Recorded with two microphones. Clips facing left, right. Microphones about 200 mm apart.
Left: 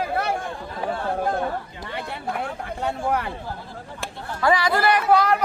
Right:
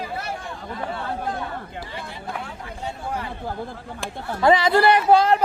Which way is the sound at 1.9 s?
60° left (ahead or behind).